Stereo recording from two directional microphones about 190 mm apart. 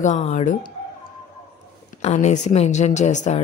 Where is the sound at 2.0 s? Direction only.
35° left (ahead or behind).